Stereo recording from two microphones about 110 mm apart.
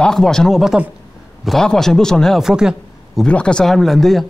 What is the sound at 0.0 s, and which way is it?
Speech, 5° left (ahead or behind).